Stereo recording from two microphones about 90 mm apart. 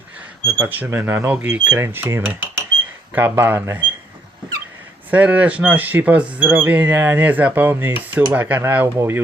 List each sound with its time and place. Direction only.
0.6 s speech: 20° right (ahead or behind)
5.1 s speech: 15° right (ahead or behind)